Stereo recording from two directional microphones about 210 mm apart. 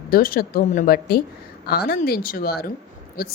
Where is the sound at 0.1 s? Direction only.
45° left (ahead or behind).